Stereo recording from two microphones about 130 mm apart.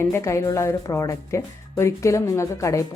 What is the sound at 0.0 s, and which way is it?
Speech, 20° left (ahead or behind).